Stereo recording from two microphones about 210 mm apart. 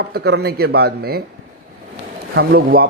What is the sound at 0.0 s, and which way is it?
A man's voice, 50° right (ahead or behind).